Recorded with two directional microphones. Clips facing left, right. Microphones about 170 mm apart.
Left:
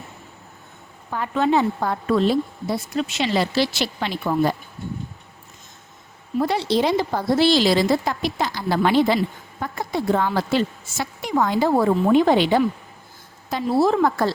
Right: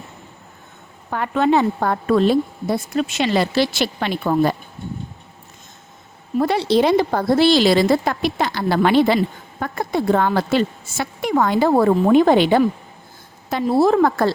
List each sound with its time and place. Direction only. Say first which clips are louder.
1.1 s a woman's voice: right 3 dB; 65° right (ahead or behind)
6.4 s a woman's voice: right 4 dB; 60° right (ahead or behind)